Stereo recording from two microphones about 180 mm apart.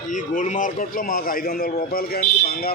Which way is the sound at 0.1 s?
45° left (ahead or behind).